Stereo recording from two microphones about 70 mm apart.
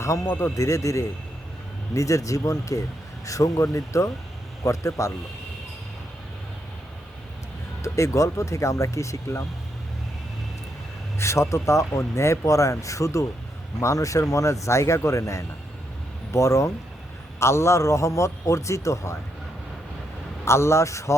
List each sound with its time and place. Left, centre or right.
0.0 s speech: left
7.8 s speech: left
11.2 s speech: left
20.4 s speech: left